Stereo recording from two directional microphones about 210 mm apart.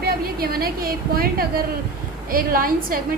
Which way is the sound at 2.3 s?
45° right (ahead or behind).